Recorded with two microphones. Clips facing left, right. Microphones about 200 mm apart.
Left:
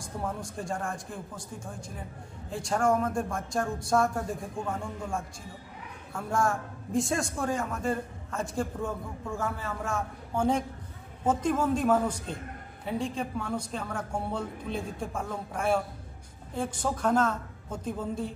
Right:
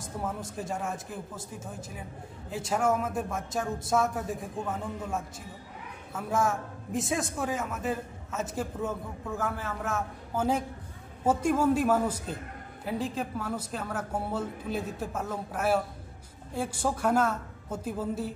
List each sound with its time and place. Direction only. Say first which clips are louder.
0.2 s a man's voice: even; 5° right (ahead or behind)